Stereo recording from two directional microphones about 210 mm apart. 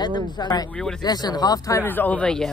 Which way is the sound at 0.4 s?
20° left (ahead or behind).